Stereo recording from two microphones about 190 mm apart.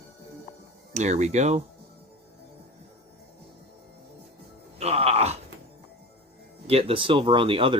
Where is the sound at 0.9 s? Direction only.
35° right (ahead or behind).